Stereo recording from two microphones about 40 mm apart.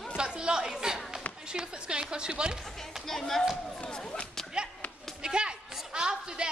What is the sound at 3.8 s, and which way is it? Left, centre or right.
Whip, centre.